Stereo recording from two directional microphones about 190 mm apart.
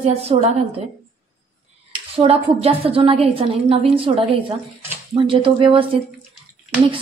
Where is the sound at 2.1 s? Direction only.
30° right (ahead or behind).